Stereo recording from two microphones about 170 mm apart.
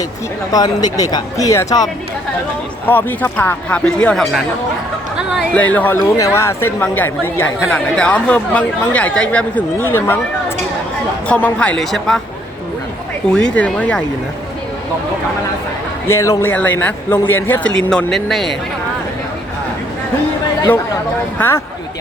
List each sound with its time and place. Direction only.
0.5 s speech: 25° left (ahead or behind); by 5.5 s 5° right (ahead or behind)
5.5 s speech: 10° left (ahead or behind)
11.3 s speech: 10° left (ahead or behind)
13.3 s speech: 5° left (ahead or behind)
16.0 s speech: 15° left (ahead or behind); by 18.5 s centre (ahead or behind)
21.3 s speech: 15° left (ahead or behind)